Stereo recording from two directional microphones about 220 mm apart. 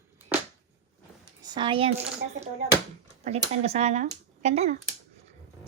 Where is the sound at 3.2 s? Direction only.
30° right (ahead or behind).